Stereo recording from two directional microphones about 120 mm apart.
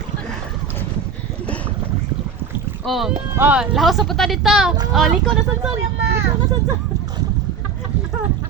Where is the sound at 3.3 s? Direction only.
15° right (ahead or behind).